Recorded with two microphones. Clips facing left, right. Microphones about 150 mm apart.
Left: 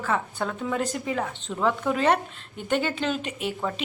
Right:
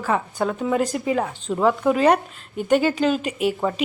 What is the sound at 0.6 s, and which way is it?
Speech, 10° right (ahead or behind).